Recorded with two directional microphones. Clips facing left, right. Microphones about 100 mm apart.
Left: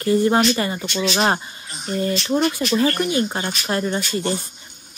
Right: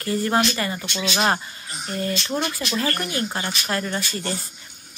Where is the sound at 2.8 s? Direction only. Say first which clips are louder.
Left 5 dB; 25° left (ahead or behind).